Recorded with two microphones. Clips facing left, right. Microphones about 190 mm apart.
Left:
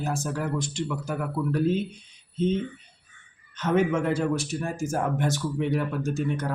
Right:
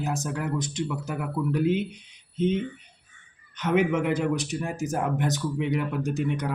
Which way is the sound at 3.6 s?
15° right (ahead or behind).